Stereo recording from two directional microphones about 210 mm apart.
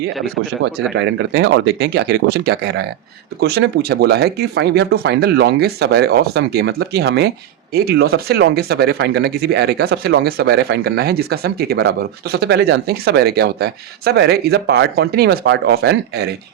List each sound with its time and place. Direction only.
0.9 s speech: 60° right (ahead or behind)